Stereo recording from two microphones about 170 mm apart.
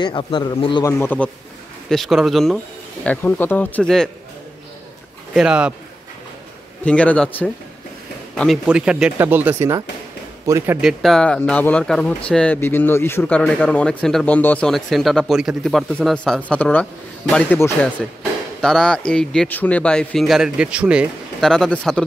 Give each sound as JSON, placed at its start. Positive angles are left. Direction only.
{"t": 0.0, "sound": "speech", "side_deg": 25}
{"t": 0.8, "sound": "a man's voice", "side_deg": 15}
{"t": 1.9, "sound": "speech", "side_deg": 0}
{"t": 5.3, "sound": "speech", "side_deg": -5}
{"t": 6.8, "sound": "a man's voice", "side_deg": 5}
{"t": 8.6, "sound": "speech", "side_deg": -5}
{"t": 10.8, "sound": "a man's voice", "side_deg": 0}